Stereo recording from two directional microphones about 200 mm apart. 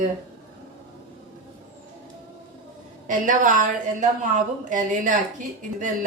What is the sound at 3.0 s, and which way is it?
A woman's voice, 40° right (ahead or behind).